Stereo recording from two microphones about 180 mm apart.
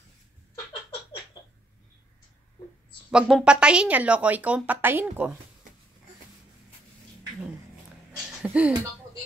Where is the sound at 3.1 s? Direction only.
5° right (ahead or behind).